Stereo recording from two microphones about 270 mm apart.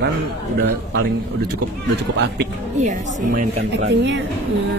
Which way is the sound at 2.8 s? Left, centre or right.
Right.